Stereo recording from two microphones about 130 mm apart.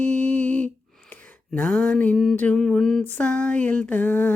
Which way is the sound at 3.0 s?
15° left (ahead or behind).